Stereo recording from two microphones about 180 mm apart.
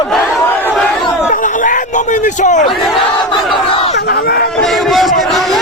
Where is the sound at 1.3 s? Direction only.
45° left (ahead or behind).